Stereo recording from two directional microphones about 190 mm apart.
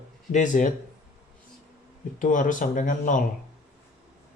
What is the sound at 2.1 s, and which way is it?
Speech, 45° left (ahead or behind).